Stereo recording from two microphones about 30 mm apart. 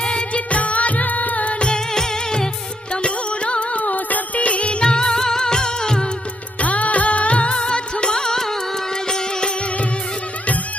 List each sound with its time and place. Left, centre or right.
0.0 s music: left
0.5 s music: left
1.7 s music: left
2.9 s music: left
4.4 s music: left
6.6 s music of bollywood: left
9.0 s music: left